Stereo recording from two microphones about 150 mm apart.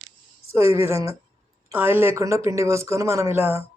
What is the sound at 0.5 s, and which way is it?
Speech, 20° right (ahead or behind).